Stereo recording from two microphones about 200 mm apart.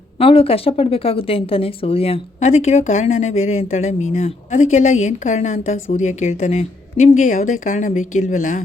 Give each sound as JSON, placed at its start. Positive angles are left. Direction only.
{"t": 0.2, "sound": "speech", "side_deg": 25}